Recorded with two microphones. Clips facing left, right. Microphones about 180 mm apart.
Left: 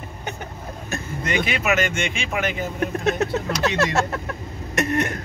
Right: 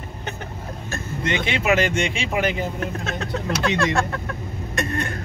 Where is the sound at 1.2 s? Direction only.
25° right (ahead or behind).